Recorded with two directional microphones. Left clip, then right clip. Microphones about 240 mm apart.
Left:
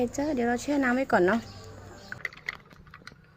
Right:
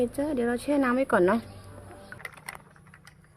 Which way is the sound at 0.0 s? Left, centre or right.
Centre.